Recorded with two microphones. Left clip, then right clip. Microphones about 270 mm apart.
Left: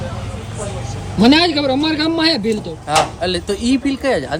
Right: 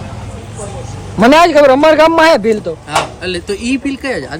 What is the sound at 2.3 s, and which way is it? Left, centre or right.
Speech, centre.